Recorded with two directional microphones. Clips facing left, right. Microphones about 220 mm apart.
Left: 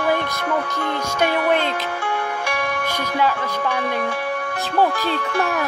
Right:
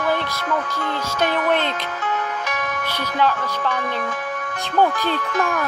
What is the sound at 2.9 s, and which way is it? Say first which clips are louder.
Speech: right 2 dB; 10° left (ahead or behind).